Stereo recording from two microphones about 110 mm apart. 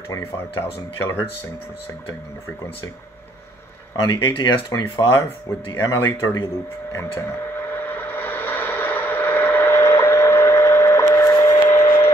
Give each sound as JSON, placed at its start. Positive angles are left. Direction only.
{"t": 0.1, "sound": "speech", "side_deg": 25}
{"t": 3.9, "sound": "speech", "side_deg": 40}
{"t": 5.0, "sound": "speech", "side_deg": 25}
{"t": 7.7, "sound": "vehicle", "side_deg": 20}
{"t": 11.6, "sound": "a sound", "side_deg": 25}